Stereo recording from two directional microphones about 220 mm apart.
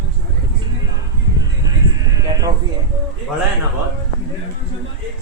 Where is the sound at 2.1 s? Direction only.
15° right (ahead or behind).